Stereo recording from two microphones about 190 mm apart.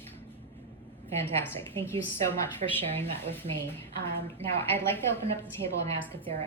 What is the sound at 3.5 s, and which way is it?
Speech, 40° right (ahead or behind).